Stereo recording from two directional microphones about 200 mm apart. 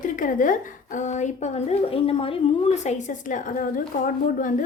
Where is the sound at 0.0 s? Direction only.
40° left (ahead or behind).